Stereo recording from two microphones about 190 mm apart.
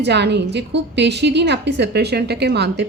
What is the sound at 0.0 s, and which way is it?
A woman's voice, 65° right (ahead or behind).